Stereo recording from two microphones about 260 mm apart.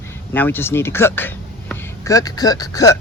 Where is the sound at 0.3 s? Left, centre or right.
Centre.